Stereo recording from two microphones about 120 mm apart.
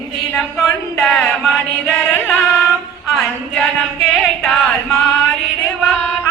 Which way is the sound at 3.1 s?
Centre (ahead or behind).